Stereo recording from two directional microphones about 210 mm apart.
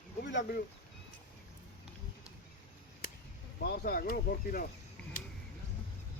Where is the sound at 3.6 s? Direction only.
45° left (ahead or behind).